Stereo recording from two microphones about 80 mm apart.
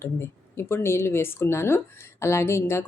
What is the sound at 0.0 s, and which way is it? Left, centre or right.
Speech, left.